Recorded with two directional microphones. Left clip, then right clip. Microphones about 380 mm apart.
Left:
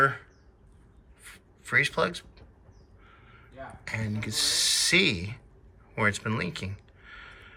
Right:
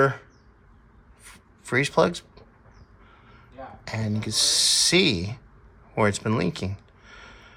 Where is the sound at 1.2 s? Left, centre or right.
Centre.